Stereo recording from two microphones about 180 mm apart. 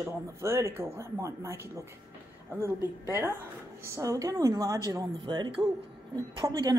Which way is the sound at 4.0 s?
20° right (ahead or behind).